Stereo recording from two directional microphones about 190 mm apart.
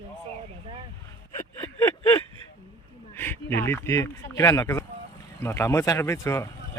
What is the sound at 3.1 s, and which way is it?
Speech, 10° left (ahead or behind).